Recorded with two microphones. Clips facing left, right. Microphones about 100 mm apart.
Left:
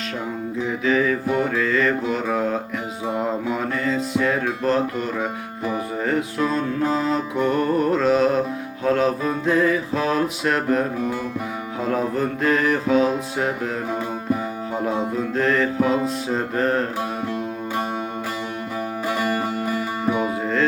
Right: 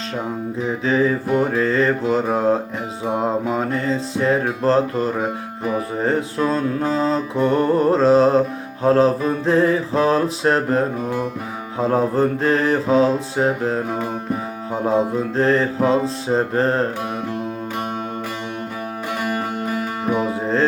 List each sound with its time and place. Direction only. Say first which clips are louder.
0.7 s mantra: right 2 dB; 30° right (ahead or behind)
15.4 s mantra: right 2 dB; 30° right (ahead or behind)
19.2 s music: right 2 dB; centre (ahead or behind)